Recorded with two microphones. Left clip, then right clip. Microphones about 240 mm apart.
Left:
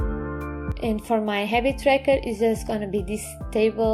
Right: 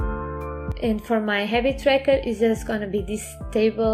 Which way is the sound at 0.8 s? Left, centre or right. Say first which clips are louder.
Even; left.